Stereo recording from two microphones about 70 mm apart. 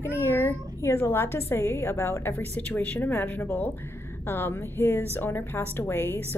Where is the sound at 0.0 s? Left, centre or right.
Left.